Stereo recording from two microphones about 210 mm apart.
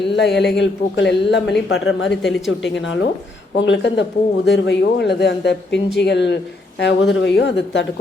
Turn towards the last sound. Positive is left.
turn(degrees=55)  # may be behind; listen again after turning